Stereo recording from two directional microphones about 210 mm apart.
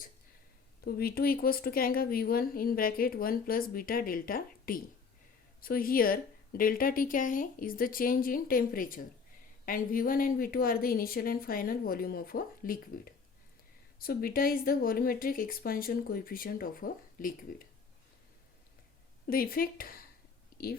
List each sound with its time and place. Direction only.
0.9 s a woman's voice: 45° left (ahead or behind)
14.0 s a woman's voice: 45° left (ahead or behind)
19.3 s a woman's voice: 45° left (ahead or behind)
20.5 s whispering: 45° left (ahead or behind)